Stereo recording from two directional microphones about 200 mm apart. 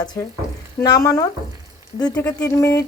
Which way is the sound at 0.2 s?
15° left (ahead or behind).